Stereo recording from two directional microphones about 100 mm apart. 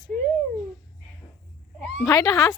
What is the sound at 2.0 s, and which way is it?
Speech, 35° left (ahead or behind).